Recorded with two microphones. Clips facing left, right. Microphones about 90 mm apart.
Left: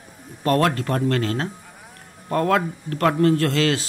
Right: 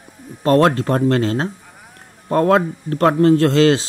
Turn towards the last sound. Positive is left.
turn(degrees=-30)  # may be behind; listen again after turning